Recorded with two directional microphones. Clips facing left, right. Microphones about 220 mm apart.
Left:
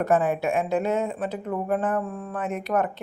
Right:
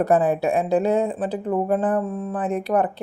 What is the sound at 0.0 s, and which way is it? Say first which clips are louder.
Speech: right 3 dB; 35° right (ahead or behind).